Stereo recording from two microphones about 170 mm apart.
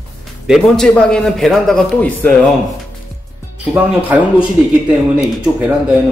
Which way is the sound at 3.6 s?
10° right (ahead or behind).